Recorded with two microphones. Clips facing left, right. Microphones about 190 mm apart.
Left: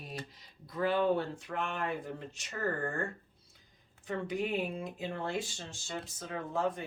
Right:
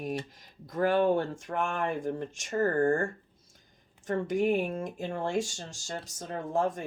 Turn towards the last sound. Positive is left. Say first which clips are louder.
# right 4 dB
turn(degrees=-45)  # may be behind; listen again after turning